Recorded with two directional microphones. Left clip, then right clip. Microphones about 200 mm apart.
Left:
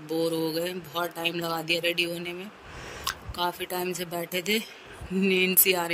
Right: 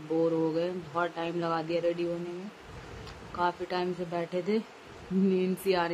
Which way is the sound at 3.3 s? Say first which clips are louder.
Right 2 dB; centre (ahead or behind).